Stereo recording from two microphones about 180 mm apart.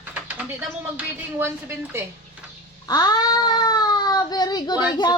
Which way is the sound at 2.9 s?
20° left (ahead or behind).